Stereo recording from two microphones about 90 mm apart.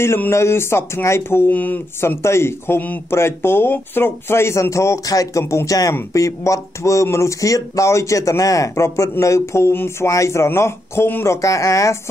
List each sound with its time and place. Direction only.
0.0 s speech: 30° left (ahead or behind)
5.4 s speech: 25° left (ahead or behind)
5.7 s speech: 40° left (ahead or behind)
11.4 s speech: 35° left (ahead or behind)